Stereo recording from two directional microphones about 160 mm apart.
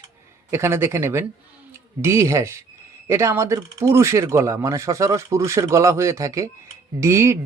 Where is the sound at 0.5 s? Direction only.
15° right (ahead or behind).